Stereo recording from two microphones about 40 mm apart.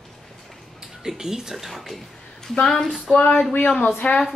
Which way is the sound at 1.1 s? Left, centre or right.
Centre.